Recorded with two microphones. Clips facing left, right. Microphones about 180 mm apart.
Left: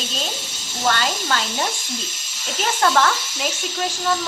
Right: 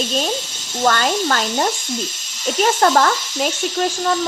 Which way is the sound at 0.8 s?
45° right (ahead or behind).